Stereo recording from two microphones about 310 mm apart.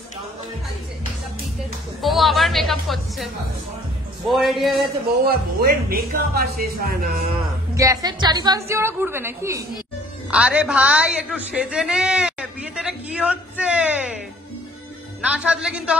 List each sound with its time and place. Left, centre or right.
2.0 s a woman's voice: centre
4.3 s a woman's voice: centre
5.2 s speech: right
7.3 s a woman's voice: centre
15.2 s a woman's voice: centre